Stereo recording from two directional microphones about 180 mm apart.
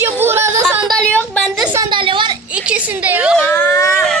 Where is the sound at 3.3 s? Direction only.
10° left (ahead or behind).